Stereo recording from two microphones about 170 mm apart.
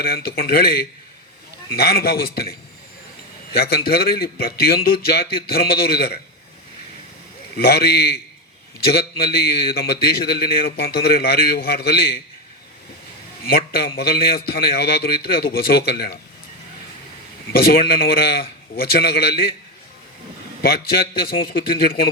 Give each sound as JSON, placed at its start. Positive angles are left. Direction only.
{"t": 0.0, "sound": "a man's voice", "side_deg": 60}
{"t": 7.5, "sound": "a man's voice", "side_deg": 65}
{"t": 13.5, "sound": "a man's voice", "side_deg": 60}
{"t": 17.7, "sound": "a man's voice", "side_deg": 60}
{"t": 20.6, "sound": "a man's voice", "side_deg": 60}